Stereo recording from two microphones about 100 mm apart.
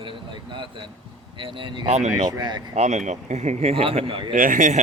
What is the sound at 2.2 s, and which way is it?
Speech, 45° right (ahead or behind).